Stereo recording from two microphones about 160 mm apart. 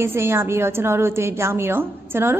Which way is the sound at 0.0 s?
15° right (ahead or behind).